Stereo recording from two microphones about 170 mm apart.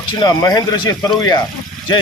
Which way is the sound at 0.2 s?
25° left (ahead or behind).